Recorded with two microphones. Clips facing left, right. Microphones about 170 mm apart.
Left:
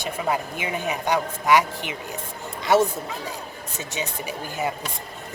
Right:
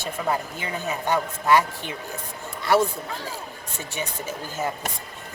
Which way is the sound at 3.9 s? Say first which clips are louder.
Left 1 dB; 15° left (ahead or behind).